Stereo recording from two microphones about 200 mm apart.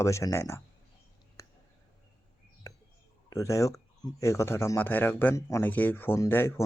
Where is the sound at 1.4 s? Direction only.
15° left (ahead or behind).